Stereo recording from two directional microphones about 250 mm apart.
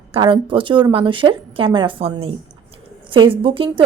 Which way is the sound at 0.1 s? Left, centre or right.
Centre.